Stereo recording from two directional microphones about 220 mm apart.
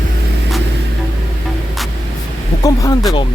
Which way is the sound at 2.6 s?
15° left (ahead or behind).